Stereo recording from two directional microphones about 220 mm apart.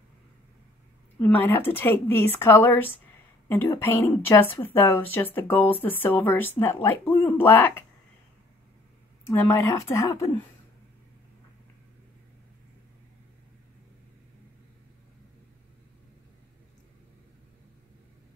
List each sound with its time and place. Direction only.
1.2 s a woman's voice: 10° left (ahead or behind)
9.2 s a woman's voice: 10° left (ahead or behind)